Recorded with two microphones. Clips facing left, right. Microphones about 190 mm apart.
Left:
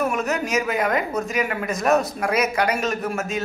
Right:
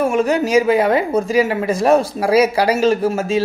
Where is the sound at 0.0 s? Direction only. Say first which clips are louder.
Right 7 dB; 30° right (ahead or behind).